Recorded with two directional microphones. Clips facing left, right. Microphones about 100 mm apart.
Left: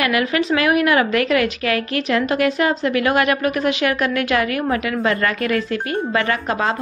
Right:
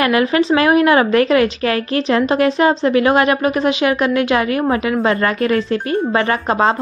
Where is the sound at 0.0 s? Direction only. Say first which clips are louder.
Right 4 dB; 30° right (ahead or behind).